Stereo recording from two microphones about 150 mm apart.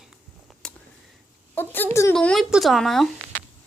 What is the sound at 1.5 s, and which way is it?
A woman's voice, 15° left (ahead or behind).